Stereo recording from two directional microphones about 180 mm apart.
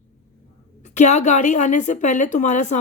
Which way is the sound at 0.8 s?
40° left (ahead or behind).